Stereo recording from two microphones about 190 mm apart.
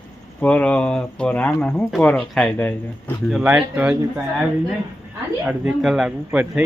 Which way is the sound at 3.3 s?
5° right (ahead or behind).